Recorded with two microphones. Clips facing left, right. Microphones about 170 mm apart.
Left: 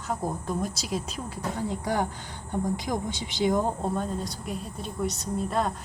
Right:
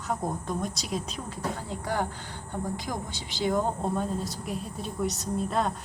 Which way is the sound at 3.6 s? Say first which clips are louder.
Even; centre (ahead or behind).